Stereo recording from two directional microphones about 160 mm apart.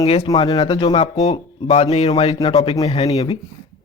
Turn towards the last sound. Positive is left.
turn(degrees=40)  # may be behind; listen again after turning